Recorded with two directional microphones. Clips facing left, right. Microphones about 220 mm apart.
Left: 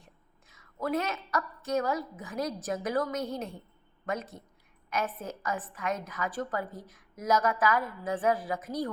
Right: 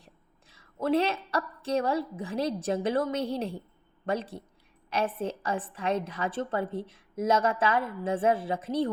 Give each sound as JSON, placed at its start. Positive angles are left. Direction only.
{"t": 0.0, "sound": "a woman's voice", "side_deg": -30}